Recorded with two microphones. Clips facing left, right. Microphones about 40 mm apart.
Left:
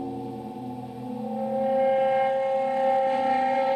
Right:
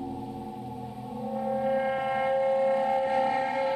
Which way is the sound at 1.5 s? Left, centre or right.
Centre.